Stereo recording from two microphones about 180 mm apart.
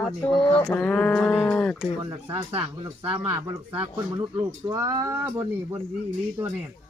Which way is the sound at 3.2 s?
10° right (ahead or behind).